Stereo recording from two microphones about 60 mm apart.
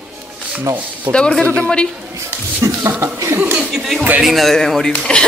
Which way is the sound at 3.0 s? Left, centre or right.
Right.